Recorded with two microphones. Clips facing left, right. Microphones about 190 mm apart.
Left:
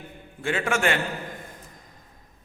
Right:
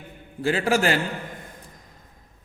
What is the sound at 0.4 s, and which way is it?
Speech, 35° right (ahead or behind).